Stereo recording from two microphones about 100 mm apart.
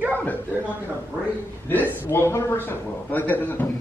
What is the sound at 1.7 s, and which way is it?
A man's voice, 20° left (ahead or behind).